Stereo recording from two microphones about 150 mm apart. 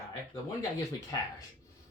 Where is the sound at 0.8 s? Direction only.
25° left (ahead or behind).